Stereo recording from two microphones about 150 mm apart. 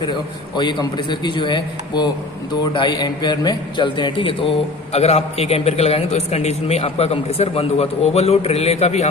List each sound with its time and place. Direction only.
0.0 s a man's voice: 30° left (ahead or behind)